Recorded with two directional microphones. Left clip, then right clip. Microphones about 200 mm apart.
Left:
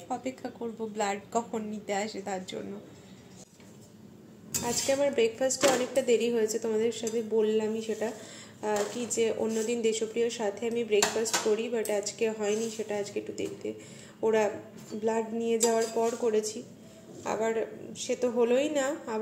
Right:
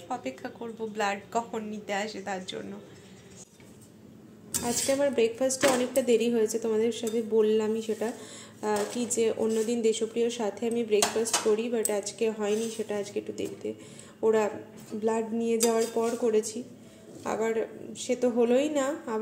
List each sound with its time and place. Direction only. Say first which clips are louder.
0.1 s a woman's voice: even; centre (ahead or behind)
4.6 s speech: right 1 dB; 10° right (ahead or behind)